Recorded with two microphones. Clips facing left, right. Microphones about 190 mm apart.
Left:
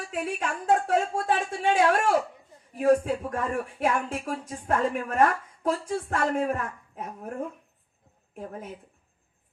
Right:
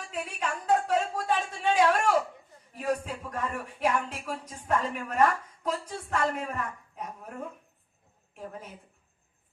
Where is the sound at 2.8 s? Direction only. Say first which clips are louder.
Left 9 dB; 50° left (ahead or behind).